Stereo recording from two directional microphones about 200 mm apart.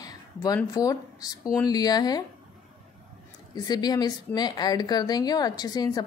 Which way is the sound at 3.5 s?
20° left (ahead or behind).